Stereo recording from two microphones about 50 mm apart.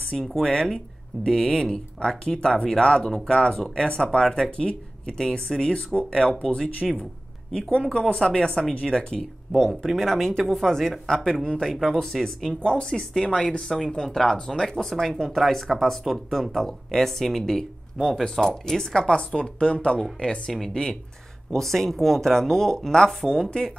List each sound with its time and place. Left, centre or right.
0.2 s speech: centre
0.5 s speech: centre
6.8 s speech: centre
7.9 s speech: centre
11.7 s speech: centre
12.4 s speech: centre